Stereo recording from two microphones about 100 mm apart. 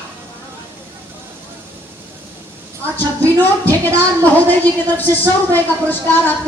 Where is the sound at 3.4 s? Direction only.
20° left (ahead or behind).